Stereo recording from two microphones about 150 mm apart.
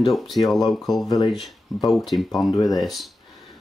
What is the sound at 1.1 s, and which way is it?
Speech, 25° left (ahead or behind).